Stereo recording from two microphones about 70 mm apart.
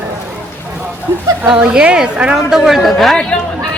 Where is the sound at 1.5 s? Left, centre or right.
Centre.